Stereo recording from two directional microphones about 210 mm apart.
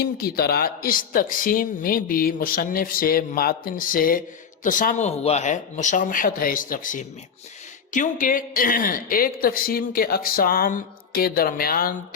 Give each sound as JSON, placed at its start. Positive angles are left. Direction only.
{"t": 0.0, "sound": "speech", "side_deg": 45}